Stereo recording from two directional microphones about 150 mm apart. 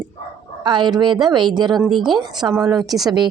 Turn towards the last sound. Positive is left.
turn(degrees=0)  # may be behind; listen again after turning